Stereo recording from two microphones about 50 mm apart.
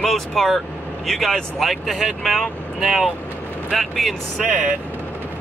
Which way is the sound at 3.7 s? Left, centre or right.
Centre.